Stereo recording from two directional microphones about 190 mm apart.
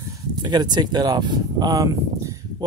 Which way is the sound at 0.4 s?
20° right (ahead or behind).